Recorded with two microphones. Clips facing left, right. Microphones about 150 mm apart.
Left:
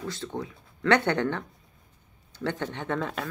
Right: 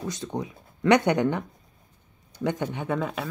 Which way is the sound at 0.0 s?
15° right (ahead or behind).